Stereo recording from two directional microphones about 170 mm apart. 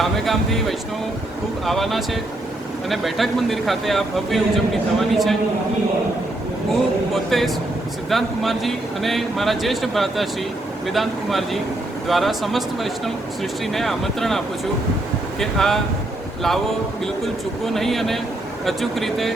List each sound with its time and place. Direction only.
0.0 s speech: centre (ahead or behind)
7.1 s speech: centre (ahead or behind)
17.7 s speech: centre (ahead or behind)